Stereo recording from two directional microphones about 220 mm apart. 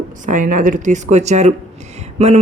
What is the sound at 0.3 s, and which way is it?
Speech, 35° right (ahead or behind).